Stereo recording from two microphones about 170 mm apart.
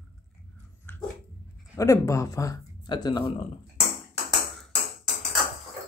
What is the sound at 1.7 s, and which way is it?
Speech, 15° left (ahead or behind).